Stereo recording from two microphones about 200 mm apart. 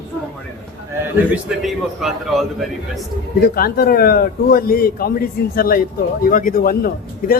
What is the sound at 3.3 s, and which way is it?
A man's voice, 50° left (ahead or behind).